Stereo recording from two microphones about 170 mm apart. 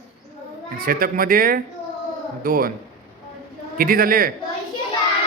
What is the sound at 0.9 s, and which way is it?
Speech, 55° right (ahead or behind).